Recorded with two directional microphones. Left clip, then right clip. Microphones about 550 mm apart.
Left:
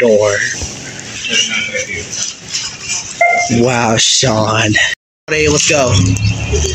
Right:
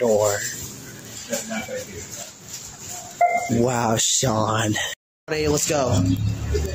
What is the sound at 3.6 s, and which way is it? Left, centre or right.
Speech, right.